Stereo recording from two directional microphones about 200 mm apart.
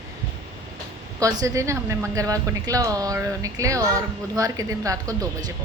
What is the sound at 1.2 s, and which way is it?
A woman's voice, 15° right (ahead or behind).